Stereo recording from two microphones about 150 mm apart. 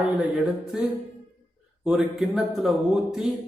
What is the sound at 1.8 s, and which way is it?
A man's voice, 5° right (ahead or behind).